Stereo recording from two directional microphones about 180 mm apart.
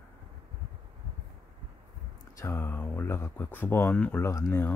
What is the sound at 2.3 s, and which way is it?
Speech, 15° left (ahead or behind).